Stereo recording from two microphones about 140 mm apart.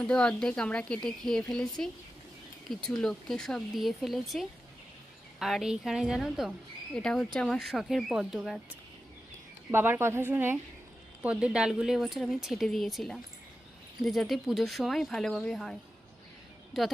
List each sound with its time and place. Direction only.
0.1 s speech: 5° left (ahead or behind)
9.7 s a woman's voice: 15° right (ahead or behind); by 15.8 s 5° left (ahead or behind)